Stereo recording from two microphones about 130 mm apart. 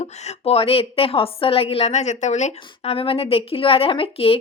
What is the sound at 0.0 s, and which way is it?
A woman's voice, 50° left (ahead or behind).